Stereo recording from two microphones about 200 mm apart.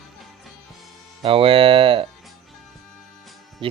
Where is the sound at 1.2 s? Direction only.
25° right (ahead or behind).